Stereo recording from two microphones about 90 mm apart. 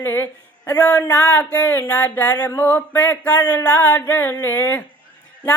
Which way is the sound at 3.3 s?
50° left (ahead or behind).